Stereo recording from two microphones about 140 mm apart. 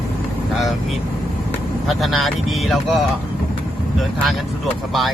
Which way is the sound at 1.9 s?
Centre (ahead or behind).